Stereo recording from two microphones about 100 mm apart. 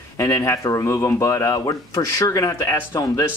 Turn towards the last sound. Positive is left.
turn(degrees=30)  # may be behind; listen again after turning